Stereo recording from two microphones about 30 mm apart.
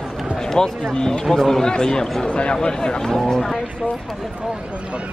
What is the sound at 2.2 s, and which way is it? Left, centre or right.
Speech, left.